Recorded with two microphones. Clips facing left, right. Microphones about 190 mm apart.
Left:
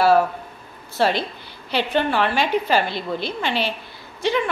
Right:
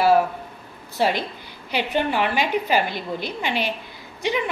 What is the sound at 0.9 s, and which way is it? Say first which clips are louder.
A woman's voice: left 2 dB; 15° right (ahead or behind).